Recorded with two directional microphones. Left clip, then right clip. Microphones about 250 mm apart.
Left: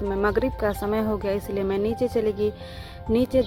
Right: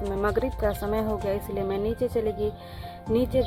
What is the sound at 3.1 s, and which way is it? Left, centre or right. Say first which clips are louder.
Speech: left 2 dB; left.